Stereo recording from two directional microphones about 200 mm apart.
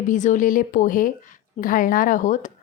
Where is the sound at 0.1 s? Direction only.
40° left (ahead or behind).